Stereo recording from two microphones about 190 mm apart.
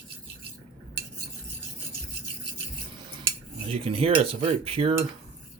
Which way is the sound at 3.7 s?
30° right (ahead or behind).